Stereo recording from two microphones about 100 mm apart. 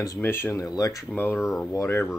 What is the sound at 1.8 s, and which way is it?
Speech, 25° left (ahead or behind).